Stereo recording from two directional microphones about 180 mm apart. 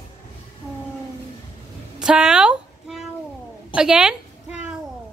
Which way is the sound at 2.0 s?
5° right (ahead or behind).